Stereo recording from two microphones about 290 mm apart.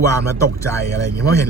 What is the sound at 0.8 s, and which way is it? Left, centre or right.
Speech, right.